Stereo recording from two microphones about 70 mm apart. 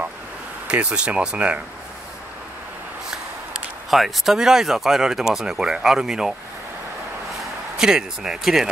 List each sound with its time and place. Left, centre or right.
0.7 s speech: centre
3.9 s speech: centre
7.7 s speech: centre